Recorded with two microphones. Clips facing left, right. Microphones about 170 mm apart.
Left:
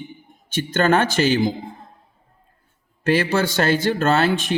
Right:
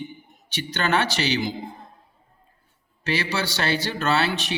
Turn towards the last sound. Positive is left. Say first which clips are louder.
# left 5 dB
turn(degrees=50)  # may be behind; listen again after turning